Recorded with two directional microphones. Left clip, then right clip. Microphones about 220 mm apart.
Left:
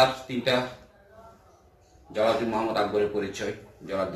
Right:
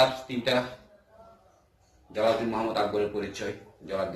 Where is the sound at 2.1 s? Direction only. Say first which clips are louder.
Left 1 dB; 5° right (ahead or behind).